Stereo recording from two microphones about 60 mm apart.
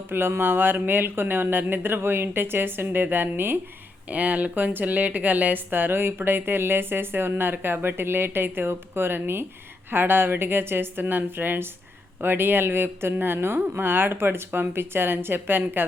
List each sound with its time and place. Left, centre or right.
0.1 s speech: right
4.1 s speech: right